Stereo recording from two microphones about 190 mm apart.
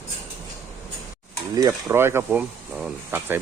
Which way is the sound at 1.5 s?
20° right (ahead or behind).